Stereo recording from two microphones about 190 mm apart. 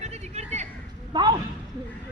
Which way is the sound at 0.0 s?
35° right (ahead or behind).